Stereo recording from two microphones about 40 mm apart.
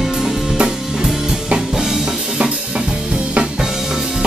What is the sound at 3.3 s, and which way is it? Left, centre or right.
Drum kit, right.